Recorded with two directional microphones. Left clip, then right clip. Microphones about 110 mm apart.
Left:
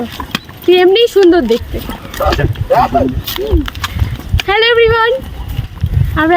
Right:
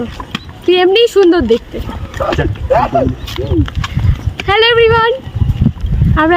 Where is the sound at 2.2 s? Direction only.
50° left (ahead or behind).